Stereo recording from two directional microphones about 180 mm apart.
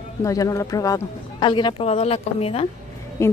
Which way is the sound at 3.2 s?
15° left (ahead or behind).